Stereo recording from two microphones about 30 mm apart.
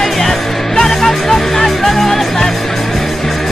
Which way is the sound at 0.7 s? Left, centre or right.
Centre.